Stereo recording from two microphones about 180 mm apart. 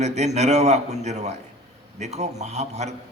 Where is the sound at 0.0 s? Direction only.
40° right (ahead or behind).